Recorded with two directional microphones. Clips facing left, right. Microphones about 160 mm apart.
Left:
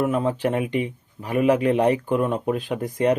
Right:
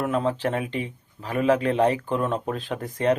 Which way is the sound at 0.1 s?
15° left (ahead or behind).